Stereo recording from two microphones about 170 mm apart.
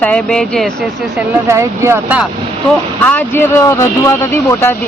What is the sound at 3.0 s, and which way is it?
Speech, 10° left (ahead or behind).